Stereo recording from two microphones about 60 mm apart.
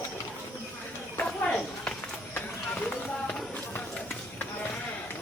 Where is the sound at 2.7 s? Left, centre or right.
Left.